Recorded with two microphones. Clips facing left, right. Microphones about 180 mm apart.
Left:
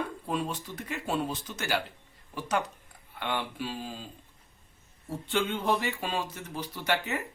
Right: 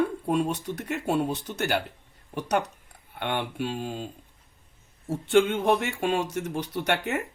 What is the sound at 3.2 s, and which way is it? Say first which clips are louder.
Speech: right 4 dB; 60° right (ahead or behind).